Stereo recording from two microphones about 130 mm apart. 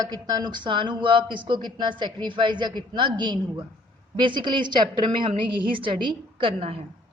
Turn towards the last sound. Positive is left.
turn(degrees=-50)  # may be behind; listen again after turning